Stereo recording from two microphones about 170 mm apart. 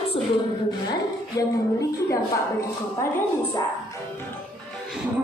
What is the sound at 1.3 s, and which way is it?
Speech, 20° left (ahead or behind).